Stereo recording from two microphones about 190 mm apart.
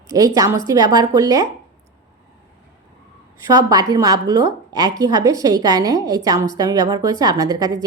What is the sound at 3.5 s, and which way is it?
A woman's voice, 20° right (ahead or behind).